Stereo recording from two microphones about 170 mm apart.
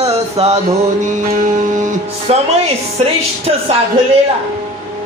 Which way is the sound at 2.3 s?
35° right (ahead or behind).